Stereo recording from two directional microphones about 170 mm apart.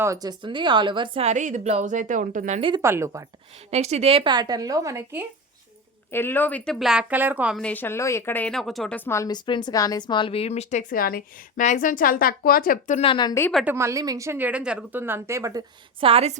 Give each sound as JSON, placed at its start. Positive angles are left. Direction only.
{"t": 0.0, "sound": "speech", "side_deg": -20}
{"t": 2.6, "sound": "a woman's voice", "side_deg": -30}
{"t": 2.8, "sound": "a woman's voice", "side_deg": -15}
{"t": 3.7, "sound": "a woman's voice", "side_deg": -40}
{"t": 6.1, "sound": "a woman's voice", "side_deg": 15}
{"t": 7.6, "sound": "speech", "side_deg": 10}
{"t": 13.0, "sound": "speech", "side_deg": 30}
{"t": 13.7, "sound": "a woman's voice", "side_deg": -15}
{"t": 16.0, "sound": "speech", "side_deg": -35}